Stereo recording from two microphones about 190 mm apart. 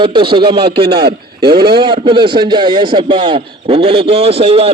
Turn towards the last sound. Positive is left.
turn(degrees=-30)  # may be behind; listen again after turning